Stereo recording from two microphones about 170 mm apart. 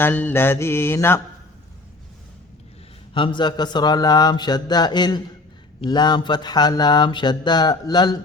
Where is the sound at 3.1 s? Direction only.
30° left (ahead or behind).